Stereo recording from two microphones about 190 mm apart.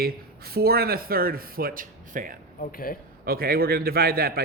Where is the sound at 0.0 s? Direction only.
55° right (ahead or behind).